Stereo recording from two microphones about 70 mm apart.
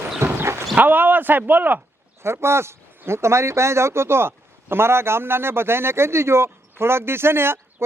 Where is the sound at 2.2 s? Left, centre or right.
Right.